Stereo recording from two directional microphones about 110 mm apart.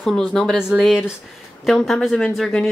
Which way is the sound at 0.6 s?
5° right (ahead or behind).